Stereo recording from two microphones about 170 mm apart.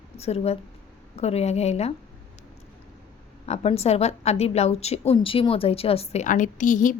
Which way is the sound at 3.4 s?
40° left (ahead or behind).